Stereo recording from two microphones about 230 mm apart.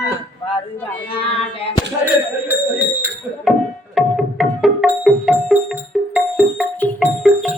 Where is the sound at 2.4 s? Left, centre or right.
Centre.